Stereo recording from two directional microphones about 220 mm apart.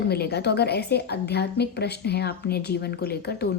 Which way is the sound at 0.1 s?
45° left (ahead or behind).